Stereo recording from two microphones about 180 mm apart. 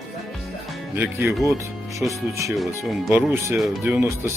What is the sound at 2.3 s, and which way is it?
Speech, 15° right (ahead or behind).